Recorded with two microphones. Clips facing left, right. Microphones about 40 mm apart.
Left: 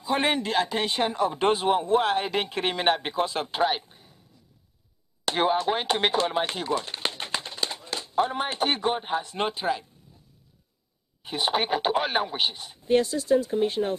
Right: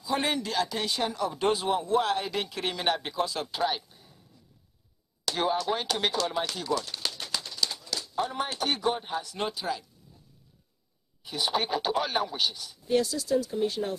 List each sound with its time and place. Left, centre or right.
0.0 s speech: left
5.2 s speech: left
11.2 s speech: left